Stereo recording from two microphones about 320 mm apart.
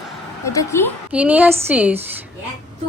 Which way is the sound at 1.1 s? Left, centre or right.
Centre.